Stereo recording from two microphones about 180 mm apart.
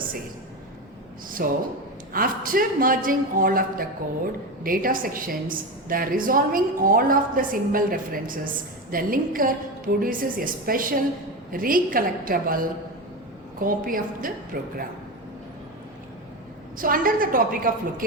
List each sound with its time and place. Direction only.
1.3 s a man's voice: 50° right (ahead or behind)
16.7 s a man's voice: 50° right (ahead or behind)